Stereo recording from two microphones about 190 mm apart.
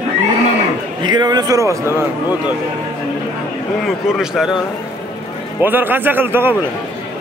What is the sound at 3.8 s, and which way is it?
Speech, centre (ahead or behind).